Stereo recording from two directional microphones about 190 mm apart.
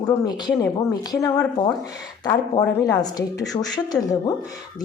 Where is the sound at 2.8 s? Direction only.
20° left (ahead or behind).